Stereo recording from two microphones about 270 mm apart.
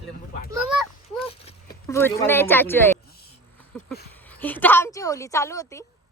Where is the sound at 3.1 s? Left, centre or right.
Left.